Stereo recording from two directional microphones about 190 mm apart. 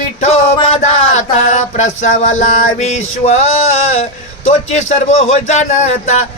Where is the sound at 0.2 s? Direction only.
35° left (ahead or behind).